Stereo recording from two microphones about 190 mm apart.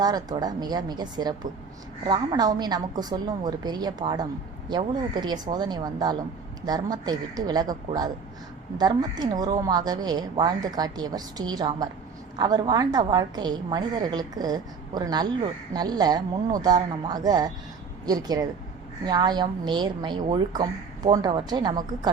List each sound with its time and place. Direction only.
0.0 s a woman's voice: 20° right (ahead or behind)